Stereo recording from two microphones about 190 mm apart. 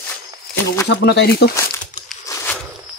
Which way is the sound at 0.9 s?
60° left (ahead or behind).